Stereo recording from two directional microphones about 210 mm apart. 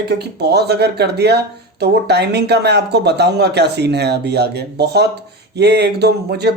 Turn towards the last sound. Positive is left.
turn(degrees=-50)  # may be behind; listen again after turning